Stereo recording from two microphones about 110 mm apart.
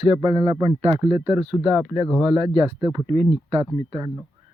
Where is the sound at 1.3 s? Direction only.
40° right (ahead or behind); by 4.0 s 55° right (ahead or behind).